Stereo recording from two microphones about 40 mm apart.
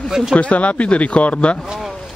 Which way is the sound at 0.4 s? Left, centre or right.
Left.